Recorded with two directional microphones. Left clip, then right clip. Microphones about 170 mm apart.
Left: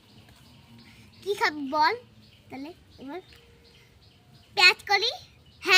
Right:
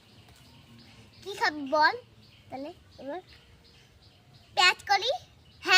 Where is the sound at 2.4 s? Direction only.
15° right (ahead or behind).